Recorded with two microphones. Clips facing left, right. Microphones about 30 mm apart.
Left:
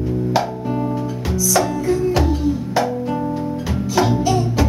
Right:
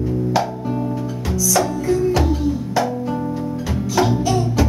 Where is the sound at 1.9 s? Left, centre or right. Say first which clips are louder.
Right 1 dB; centre.